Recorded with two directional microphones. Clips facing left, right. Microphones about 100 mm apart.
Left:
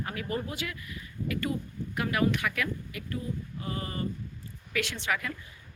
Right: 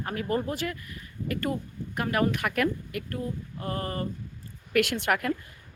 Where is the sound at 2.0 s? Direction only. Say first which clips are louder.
Right 1 dB; 45° right (ahead or behind).